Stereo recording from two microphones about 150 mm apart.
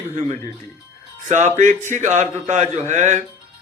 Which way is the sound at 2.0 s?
55° right (ahead or behind).